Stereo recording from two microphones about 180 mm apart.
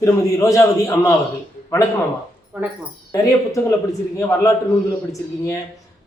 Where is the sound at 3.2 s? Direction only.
15° left (ahead or behind).